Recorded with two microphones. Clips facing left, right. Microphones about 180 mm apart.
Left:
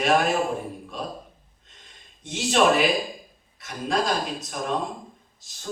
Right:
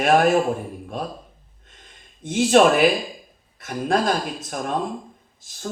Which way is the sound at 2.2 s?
50° right (ahead or behind).